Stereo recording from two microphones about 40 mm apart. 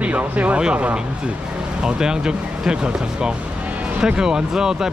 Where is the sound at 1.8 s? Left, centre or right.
Centre.